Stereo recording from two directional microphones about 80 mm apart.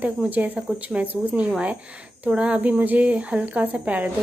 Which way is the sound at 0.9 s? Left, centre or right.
Centre.